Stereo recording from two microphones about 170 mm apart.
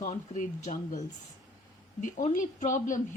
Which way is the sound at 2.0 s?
45° left (ahead or behind).